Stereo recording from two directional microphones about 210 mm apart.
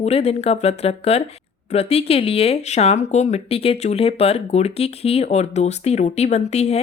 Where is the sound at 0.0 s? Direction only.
30° left (ahead or behind).